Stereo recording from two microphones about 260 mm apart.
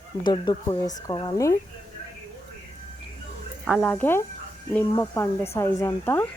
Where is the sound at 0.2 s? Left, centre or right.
Centre.